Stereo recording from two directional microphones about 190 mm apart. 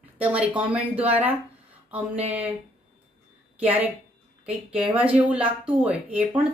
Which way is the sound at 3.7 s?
10° right (ahead or behind).